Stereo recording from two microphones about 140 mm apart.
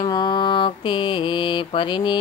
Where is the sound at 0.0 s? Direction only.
30° left (ahead or behind).